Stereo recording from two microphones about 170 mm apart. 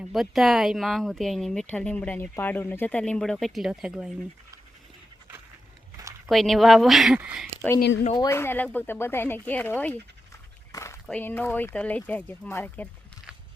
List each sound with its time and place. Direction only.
0.0 s speech: centre (ahead or behind)
6.2 s speech: centre (ahead or behind)
8.3 s speech: 15° left (ahead or behind)
10.7 s a sound: 20° left (ahead or behind)
11.0 s speech: 10° left (ahead or behind)